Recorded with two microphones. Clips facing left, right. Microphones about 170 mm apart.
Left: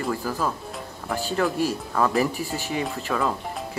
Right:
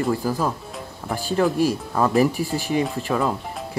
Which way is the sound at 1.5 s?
15° right (ahead or behind).